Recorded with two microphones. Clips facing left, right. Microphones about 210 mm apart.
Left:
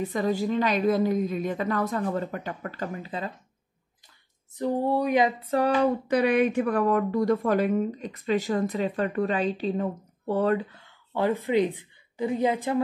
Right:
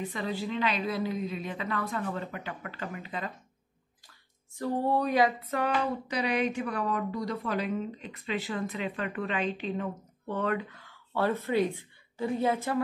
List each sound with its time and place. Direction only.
0.1 s a woman's voice: 45° left (ahead or behind)
4.6 s female singing: 10° left (ahead or behind); by 5.7 s 30° left (ahead or behind)
5.8 s speech: 55° left (ahead or behind); by 12.8 s 15° left (ahead or behind)